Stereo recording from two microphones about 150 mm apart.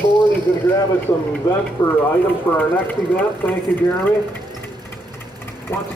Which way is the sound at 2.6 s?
10° left (ahead or behind).